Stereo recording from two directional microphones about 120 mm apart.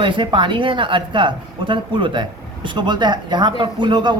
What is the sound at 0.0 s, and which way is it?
A man's voice, 40° right (ahead or behind).